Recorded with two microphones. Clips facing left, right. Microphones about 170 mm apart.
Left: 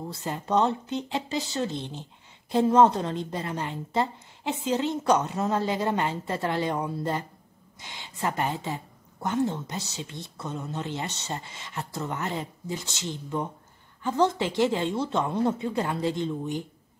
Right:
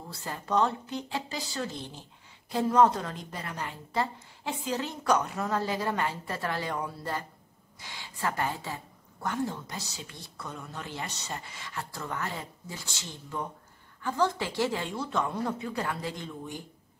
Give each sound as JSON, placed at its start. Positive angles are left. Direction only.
{"t": 0.1, "sound": "a woman's voice", "side_deg": 20}